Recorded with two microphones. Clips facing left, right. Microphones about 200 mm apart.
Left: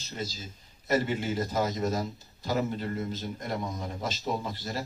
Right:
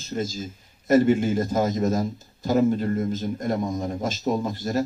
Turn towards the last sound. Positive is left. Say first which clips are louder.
# right 9 dB
turn(degrees=-45)  # may be behind; listen again after turning